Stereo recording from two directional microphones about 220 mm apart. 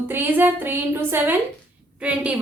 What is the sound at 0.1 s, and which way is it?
A woman's voice, 10° right (ahead or behind).